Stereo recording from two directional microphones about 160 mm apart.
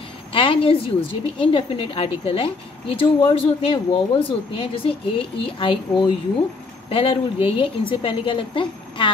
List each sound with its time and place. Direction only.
0.3 s a woman's voice: 35° left (ahead or behind)